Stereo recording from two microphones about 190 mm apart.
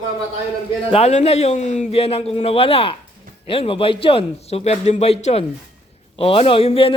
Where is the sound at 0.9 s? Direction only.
35° left (ahead or behind).